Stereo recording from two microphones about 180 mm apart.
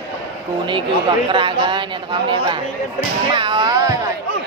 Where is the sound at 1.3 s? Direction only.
25° right (ahead or behind).